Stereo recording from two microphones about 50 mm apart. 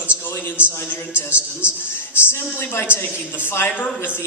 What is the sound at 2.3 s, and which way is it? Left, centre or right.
Speech, left.